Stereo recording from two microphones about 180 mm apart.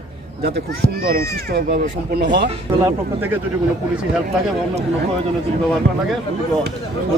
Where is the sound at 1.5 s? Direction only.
60° right (ahead or behind).